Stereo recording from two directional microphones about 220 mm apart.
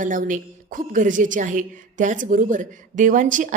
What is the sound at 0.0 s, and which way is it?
A woman's voice, 35° right (ahead or behind).